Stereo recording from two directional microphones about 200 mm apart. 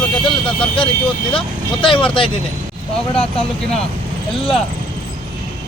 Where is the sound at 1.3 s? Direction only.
25° left (ahead or behind).